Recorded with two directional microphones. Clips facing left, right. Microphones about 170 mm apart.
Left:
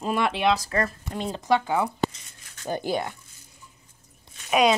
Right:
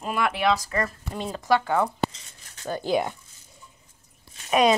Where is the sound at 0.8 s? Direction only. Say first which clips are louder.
Left 1 dB; centre (ahead or behind).